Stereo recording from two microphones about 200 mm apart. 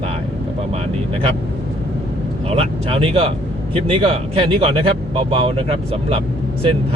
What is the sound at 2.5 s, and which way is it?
Speech, 30° right (ahead or behind).